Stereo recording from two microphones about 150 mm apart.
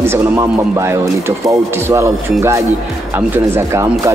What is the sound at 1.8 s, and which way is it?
Speech, 20° right (ahead or behind).